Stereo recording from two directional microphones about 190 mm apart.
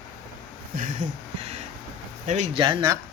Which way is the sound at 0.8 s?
40° right (ahead or behind).